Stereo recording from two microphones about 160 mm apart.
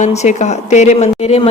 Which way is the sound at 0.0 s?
45° left (ahead or behind).